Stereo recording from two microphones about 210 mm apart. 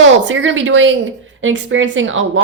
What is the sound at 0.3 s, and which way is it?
Speech, 60° right (ahead or behind).